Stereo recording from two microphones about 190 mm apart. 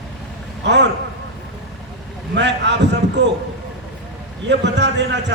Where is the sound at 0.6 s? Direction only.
65° right (ahead or behind).